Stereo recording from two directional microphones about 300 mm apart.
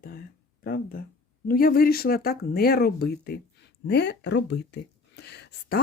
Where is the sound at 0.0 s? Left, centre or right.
Left.